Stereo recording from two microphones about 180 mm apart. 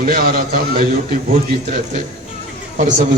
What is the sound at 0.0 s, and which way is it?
Speech, 55° right (ahead or behind).